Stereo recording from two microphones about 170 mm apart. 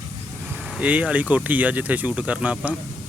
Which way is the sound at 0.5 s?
5° right (ahead or behind).